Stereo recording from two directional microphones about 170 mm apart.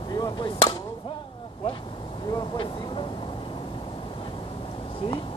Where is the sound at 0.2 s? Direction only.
25° left (ahead or behind).